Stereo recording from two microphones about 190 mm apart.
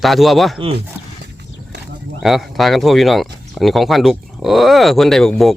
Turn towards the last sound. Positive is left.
turn(degrees=0)  # may be behind; listen again after turning